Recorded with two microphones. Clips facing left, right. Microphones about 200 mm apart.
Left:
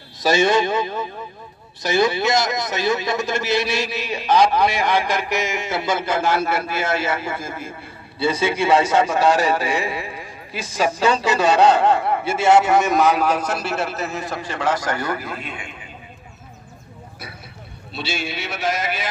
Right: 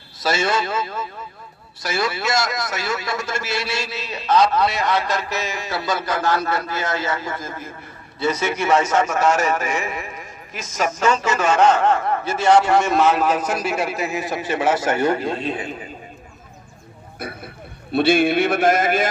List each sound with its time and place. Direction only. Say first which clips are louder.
0.2 s a man's voice: left 4 dB; 15° left (ahead or behind)
6.2 s a man's voice: left 1 dB; 10° left (ahead or behind)
9.1 s a man's voice: left 1 dB; 35° left (ahead or behind)
11.2 s a man's voice: left 3 dB; 15° left (ahead or behind); by 13.9 s 5° right (ahead or behind)
14.1 s a man's voice: right 4 dB; 20° right (ahead or behind); by 15.9 s 35° right (ahead or behind)
17.2 s speech: right 9 dB; 50° right (ahead or behind)
17.9 s a sound: right 12 dB; 55° right (ahead or behind)